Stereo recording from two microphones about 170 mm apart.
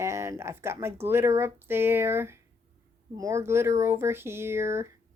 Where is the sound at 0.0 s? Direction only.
15° right (ahead or behind).